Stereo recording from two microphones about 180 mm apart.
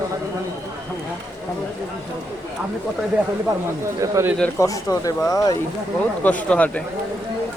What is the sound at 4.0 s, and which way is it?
Speech, 15° right (ahead or behind).